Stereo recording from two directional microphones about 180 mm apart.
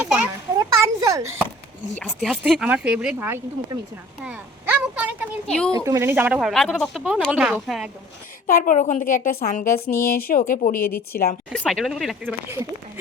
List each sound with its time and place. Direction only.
0.0 s children playing: 5° right (ahead or behind)
0.8 s a sound: 15° right (ahead or behind)
2.0 s speech: centre (ahead or behind)
4.2 s a sound: 10° right (ahead or behind)
5.5 s speech: 5° left (ahead or behind)
5.7 s speech: 15° right (ahead or behind)
8.4 s a woman's voice: 50° left (ahead or behind)
11.5 s speech: 5° left (ahead or behind)
12.2 s speech: 15° right (ahead or behind)